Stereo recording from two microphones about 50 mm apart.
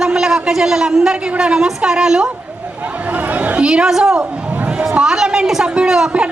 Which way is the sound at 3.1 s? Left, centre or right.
Right.